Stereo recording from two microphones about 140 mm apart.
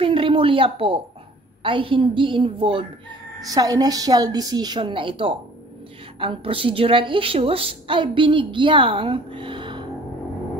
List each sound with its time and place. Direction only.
0.0 s a woman's voice: 40° right (ahead or behind)
3.4 s a woman's voice: 25° right (ahead or behind)